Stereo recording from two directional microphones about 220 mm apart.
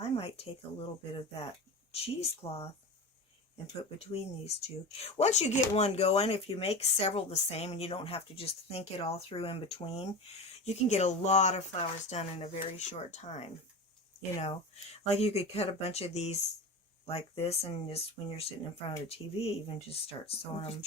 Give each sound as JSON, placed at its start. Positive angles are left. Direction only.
{"t": 0.0, "sound": "a sound", "side_deg": 25}
{"t": 1.9, "sound": "speech", "side_deg": 25}
{"t": 3.9, "sound": "speech", "side_deg": 30}
{"t": 15.0, "sound": "speech", "side_deg": 30}